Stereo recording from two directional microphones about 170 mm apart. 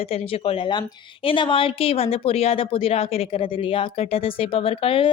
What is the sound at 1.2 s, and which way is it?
A woman's voice, 30° left (ahead or behind).